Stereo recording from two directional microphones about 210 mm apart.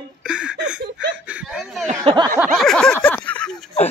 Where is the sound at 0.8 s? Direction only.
55° right (ahead or behind).